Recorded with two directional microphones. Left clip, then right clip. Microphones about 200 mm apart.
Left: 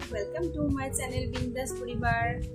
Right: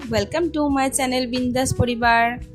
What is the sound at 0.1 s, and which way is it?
A woman's voice, 50° right (ahead or behind).